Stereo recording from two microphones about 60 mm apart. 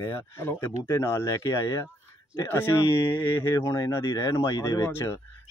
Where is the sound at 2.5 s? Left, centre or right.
Left.